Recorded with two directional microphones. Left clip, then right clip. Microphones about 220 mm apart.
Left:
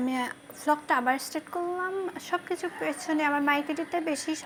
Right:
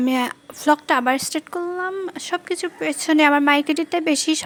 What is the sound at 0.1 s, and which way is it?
A woman's voice, 45° right (ahead or behind).